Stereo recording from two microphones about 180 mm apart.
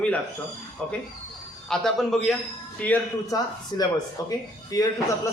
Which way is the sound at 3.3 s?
20° left (ahead or behind).